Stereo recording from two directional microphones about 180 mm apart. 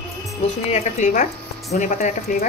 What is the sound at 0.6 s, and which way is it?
Speech, 40° left (ahead or behind).